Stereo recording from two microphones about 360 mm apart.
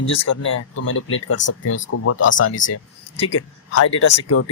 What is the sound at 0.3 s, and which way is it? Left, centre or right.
Speech, left.